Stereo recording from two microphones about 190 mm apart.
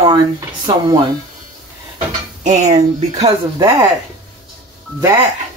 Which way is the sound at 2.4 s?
35° right (ahead or behind).